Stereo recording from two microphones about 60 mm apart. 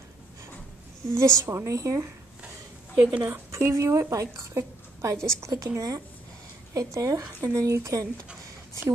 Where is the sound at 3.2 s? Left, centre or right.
Right.